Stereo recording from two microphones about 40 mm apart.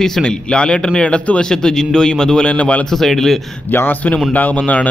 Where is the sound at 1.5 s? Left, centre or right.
Centre.